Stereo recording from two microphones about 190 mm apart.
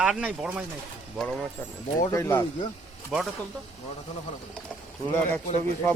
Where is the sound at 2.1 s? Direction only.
15° left (ahead or behind).